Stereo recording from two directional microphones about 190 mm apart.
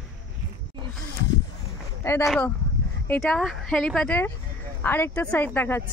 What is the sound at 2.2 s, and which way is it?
Speech, centre (ahead or behind).